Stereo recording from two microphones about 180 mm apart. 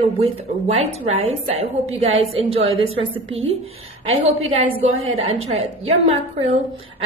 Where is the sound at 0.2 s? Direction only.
35° right (ahead or behind).